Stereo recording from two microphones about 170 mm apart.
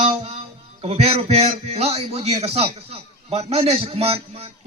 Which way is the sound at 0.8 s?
35° right (ahead or behind).